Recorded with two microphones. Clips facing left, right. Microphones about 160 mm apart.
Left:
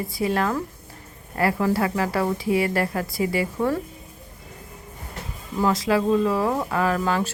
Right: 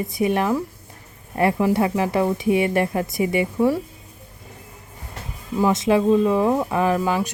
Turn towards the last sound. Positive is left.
turn(degrees=-15)  # may be behind; listen again after turning